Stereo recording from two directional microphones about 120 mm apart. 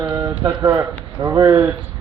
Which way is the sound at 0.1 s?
25° right (ahead or behind).